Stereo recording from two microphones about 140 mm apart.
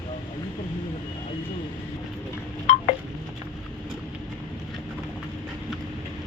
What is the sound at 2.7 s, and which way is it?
Wind chime, 60° left (ahead or behind).